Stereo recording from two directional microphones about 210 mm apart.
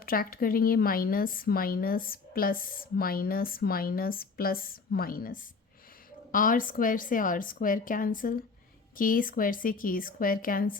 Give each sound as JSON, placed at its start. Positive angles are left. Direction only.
{"t": 0.0, "sound": "a woman's voice", "side_deg": 45}